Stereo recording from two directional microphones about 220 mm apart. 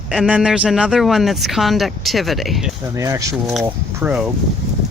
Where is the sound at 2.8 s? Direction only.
15° right (ahead or behind).